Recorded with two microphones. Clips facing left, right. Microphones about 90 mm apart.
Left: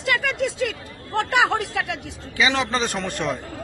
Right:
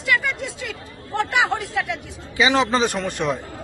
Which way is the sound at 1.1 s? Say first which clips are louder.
Left 1 dB; 55° left (ahead or behind).